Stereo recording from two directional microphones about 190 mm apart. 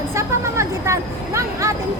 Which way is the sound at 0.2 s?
15° right (ahead or behind).